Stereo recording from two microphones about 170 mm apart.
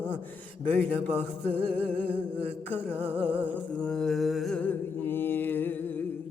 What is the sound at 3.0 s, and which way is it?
Music, 35° right (ahead or behind).